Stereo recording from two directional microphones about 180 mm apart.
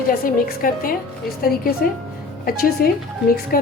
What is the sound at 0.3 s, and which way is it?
A woman's voice, 50° left (ahead or behind).